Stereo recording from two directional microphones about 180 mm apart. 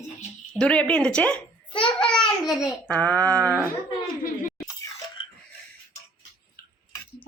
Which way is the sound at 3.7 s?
50° left (ahead or behind).